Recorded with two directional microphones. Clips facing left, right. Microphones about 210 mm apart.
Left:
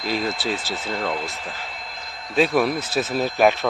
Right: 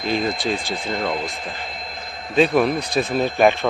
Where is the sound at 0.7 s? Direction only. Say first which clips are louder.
Right 2 dB; 15° right (ahead or behind).